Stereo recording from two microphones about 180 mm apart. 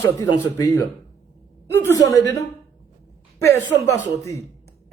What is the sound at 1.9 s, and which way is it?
Speech, 15° left (ahead or behind).